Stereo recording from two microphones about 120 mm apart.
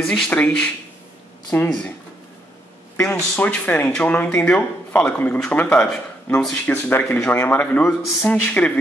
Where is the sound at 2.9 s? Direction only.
20° left (ahead or behind).